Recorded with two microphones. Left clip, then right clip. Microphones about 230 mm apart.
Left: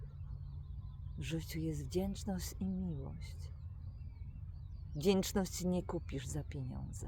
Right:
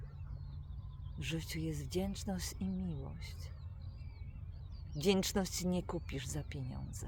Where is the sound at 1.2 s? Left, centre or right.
Centre.